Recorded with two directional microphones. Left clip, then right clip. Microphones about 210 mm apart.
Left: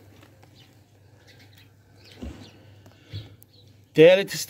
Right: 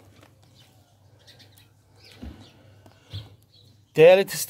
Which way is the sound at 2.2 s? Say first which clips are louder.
Left 4 dB; 10° right (ahead or behind).